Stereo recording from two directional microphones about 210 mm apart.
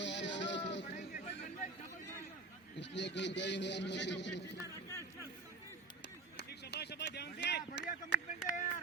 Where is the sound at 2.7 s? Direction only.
55° left (ahead or behind).